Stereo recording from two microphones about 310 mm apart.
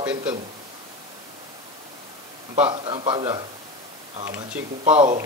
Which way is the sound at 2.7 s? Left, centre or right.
Centre.